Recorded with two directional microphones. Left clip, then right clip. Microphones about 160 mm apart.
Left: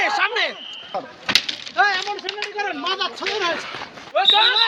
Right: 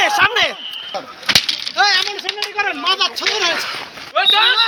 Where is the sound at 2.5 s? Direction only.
30° left (ahead or behind).